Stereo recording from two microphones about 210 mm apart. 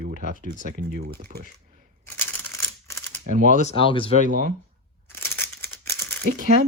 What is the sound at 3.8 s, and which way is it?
Speech, 25° left (ahead or behind).